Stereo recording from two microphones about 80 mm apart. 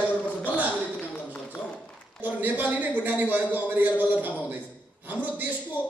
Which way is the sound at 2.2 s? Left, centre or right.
Right.